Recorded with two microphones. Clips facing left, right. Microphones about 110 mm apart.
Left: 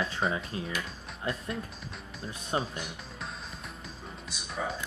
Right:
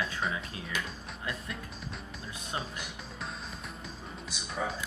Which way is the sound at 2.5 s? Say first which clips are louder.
Left 6 dB; 30° left (ahead or behind).